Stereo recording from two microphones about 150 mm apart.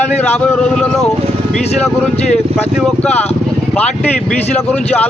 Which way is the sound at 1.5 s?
45° left (ahead or behind).